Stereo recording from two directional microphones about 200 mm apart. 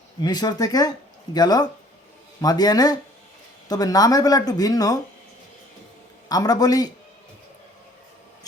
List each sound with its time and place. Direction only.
0.2 s speech: 20° left (ahead or behind)
6.2 s speech: 20° left (ahead or behind)